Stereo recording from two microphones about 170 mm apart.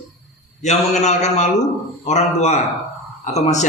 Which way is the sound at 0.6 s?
45° left (ahead or behind).